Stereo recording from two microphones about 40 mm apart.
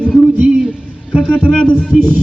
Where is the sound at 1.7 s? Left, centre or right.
Left.